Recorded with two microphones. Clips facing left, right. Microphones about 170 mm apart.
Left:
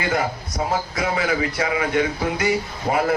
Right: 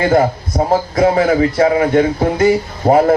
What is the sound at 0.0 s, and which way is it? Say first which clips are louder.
A man's voice: right 10 dB; 50° right (ahead or behind).